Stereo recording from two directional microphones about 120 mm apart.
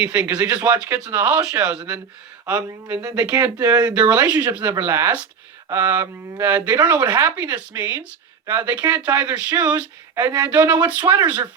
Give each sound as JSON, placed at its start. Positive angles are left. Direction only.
{"t": 0.0, "sound": "speech", "side_deg": -10}
{"t": 2.5, "sound": "speech", "side_deg": -20}